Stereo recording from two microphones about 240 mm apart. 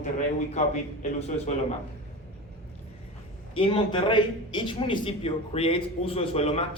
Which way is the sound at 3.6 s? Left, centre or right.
Left.